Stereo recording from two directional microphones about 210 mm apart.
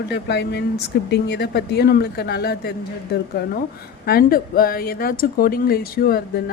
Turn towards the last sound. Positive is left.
turn(degrees=45)  # may be behind; listen again after turning